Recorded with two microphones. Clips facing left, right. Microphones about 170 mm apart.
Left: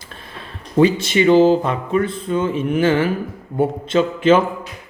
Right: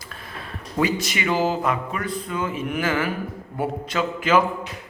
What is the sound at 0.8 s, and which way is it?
Speech, 30° left (ahead or behind).